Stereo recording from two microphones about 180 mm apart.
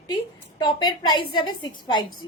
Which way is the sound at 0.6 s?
25° left (ahead or behind).